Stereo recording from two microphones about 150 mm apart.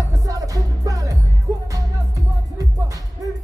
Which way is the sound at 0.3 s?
25° right (ahead or behind).